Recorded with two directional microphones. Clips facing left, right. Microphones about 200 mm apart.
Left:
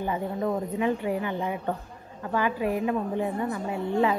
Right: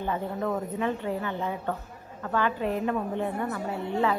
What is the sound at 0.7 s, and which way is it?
Speech, 10° left (ahead or behind).